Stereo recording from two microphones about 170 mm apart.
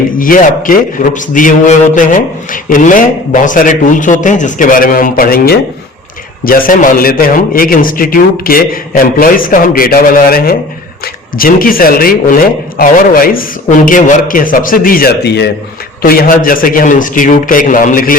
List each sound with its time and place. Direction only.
0.2 s a man's voice: 50° left (ahead or behind); by 15.4 s 75° left (ahead or behind)
16.0 s speech: 60° left (ahead or behind)